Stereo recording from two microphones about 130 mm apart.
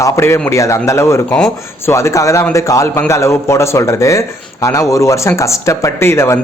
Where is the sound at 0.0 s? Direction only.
20° left (ahead or behind).